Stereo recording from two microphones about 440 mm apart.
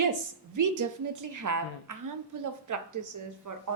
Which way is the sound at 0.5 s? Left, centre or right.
Right.